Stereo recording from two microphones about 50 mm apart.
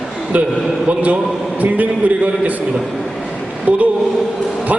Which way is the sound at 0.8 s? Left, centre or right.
Right.